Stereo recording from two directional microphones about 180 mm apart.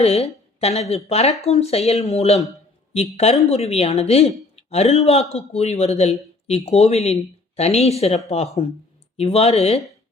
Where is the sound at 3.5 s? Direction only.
35° left (ahead or behind).